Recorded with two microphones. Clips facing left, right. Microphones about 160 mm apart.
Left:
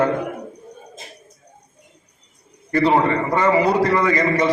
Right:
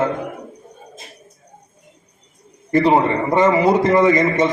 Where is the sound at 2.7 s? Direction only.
20° right (ahead or behind).